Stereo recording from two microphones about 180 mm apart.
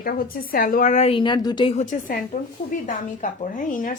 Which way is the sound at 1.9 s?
45° left (ahead or behind).